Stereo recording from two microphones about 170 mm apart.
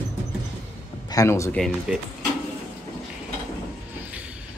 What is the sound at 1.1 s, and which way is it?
Speech, 15° left (ahead or behind).